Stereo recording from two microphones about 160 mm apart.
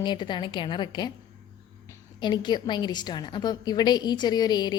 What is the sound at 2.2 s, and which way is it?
A woman's voice, 30° left (ahead or behind).